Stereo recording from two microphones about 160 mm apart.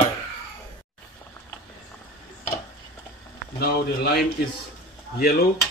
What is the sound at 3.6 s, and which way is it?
Speech, 80° left.